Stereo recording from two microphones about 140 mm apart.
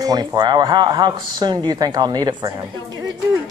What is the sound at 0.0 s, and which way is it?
Speech, 25° right (ahead or behind).